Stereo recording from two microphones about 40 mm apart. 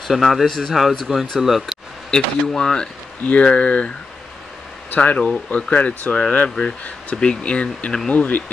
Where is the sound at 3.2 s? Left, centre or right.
Left.